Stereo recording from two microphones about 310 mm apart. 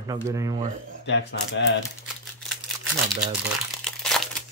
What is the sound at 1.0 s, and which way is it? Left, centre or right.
Speech, left.